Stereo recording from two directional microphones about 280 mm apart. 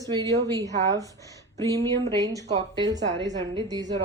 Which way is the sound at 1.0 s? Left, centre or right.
Centre.